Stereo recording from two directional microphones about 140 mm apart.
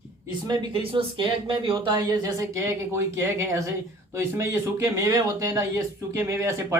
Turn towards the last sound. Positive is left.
turn(degrees=-20)  # may be behind; listen again after turning